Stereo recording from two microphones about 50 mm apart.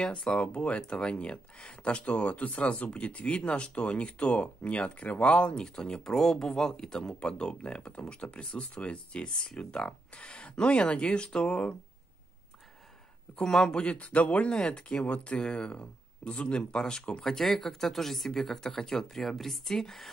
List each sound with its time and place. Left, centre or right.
0.0 s speech: centre
13.4 s speech: centre
13.8 s speech: left; by 20.1 s centre